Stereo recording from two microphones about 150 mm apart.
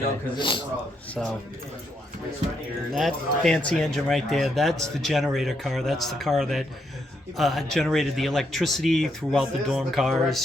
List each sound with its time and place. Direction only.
0.3 s a man's voice: 30° left (ahead or behind)
2.9 s speech: centre (ahead or behind)